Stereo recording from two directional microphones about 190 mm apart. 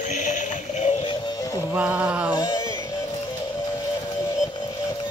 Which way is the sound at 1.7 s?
5° right (ahead or behind).